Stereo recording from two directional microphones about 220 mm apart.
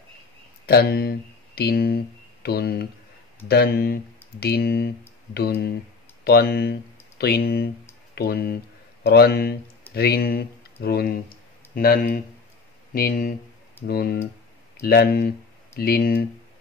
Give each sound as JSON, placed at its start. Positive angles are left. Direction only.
{"t": 0.7, "sound": "speech", "side_deg": 45}